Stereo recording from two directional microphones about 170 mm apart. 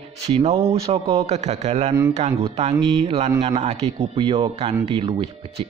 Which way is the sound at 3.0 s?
35° right (ahead or behind).